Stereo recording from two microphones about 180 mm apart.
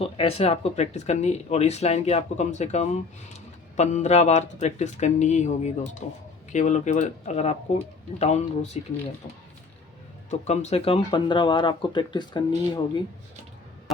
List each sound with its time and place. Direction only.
0.0 s speech: 35° left (ahead or behind)
10.2 s speech: 40° left (ahead or behind)